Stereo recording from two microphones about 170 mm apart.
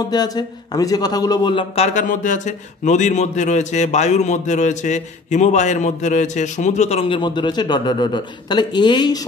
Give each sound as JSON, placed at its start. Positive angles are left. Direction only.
{"t": 0.1, "sound": "speech", "side_deg": 25}
{"t": 2.0, "sound": "a man's voice", "side_deg": 45}